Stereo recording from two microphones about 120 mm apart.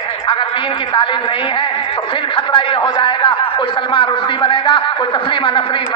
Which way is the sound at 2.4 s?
45° left (ahead or behind).